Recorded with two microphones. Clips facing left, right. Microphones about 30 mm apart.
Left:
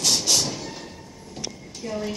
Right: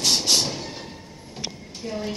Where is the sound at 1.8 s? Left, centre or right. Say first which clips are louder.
Left 1 dB; centre.